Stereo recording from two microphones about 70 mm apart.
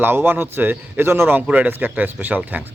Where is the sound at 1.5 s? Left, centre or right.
Right.